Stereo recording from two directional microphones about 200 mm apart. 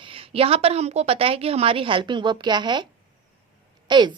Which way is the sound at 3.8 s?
20° right (ahead or behind).